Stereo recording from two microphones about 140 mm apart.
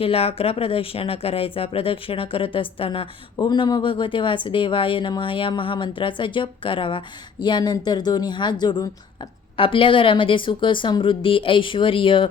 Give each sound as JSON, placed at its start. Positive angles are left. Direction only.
{"t": 0.0, "sound": "speech", "side_deg": 45}